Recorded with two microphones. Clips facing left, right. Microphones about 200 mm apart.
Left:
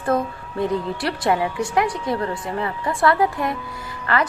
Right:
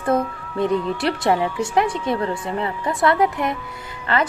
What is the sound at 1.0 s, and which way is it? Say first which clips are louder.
Speech: even; 25° right (ahead or behind).